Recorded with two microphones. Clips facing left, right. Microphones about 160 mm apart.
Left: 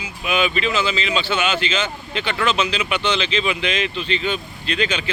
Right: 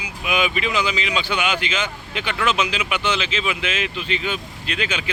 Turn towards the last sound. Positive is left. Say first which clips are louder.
# left 3 dB
turn(degrees=-10)  # may be behind; listen again after turning